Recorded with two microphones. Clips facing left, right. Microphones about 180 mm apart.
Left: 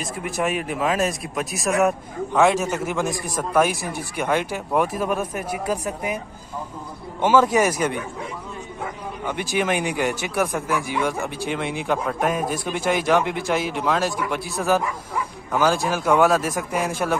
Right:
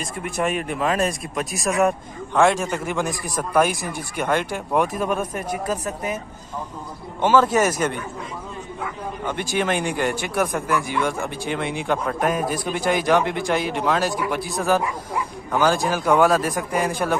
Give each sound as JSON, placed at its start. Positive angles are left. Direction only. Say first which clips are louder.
{"t": 0.0, "sound": "speech", "louder": "even", "side_deg": 5}
{"t": 7.2, "sound": "speech", "louder": "even", "side_deg": 10}
{"t": 9.2, "sound": "speech", "louder": "even", "side_deg": 5}
{"t": 15.5, "sound": "speech", "louder": "right 1 dB", "side_deg": 0}